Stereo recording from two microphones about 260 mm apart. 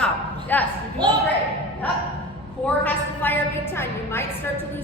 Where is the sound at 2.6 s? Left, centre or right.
Centre.